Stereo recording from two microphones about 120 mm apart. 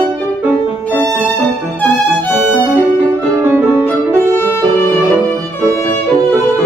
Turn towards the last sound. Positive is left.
turn(degrees=20)  # may be behind; listen again after turning